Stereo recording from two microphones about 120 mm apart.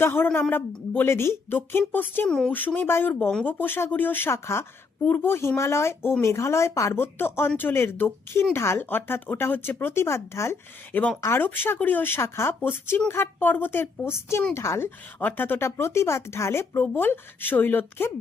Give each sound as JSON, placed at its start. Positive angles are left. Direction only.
{"t": 0.0, "sound": "a woman's voice", "side_deg": 20}